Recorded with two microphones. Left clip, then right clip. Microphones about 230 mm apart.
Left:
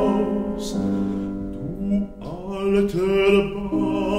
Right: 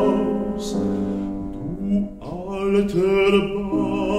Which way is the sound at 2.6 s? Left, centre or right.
Left.